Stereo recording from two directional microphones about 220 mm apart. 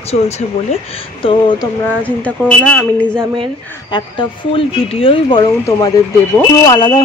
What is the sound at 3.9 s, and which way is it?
Speech, 20° left (ahead or behind).